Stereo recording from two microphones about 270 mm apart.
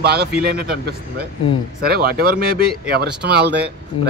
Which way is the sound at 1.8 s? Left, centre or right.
Right.